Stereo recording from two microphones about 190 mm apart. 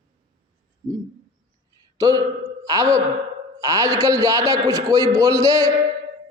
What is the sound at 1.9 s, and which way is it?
A man's voice, 20° right (ahead or behind).